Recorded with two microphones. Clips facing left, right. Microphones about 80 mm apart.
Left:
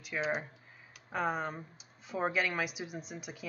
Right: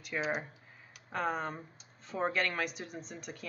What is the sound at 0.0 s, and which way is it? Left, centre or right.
A woman's voice, centre.